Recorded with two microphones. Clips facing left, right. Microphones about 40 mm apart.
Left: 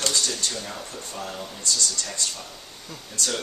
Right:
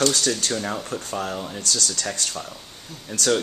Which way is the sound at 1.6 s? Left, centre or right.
Right.